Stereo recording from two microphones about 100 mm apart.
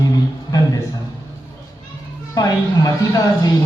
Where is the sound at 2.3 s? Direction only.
35° left (ahead or behind).